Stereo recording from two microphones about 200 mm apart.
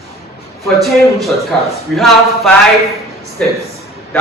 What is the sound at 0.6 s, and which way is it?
Speech, centre (ahead or behind).